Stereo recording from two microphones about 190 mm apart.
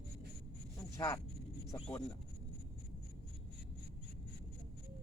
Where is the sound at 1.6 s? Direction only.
15° left (ahead or behind).